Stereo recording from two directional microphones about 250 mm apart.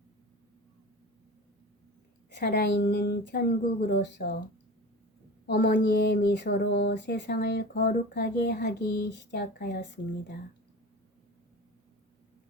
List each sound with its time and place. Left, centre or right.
2.3 s speech: left
5.5 s speech: left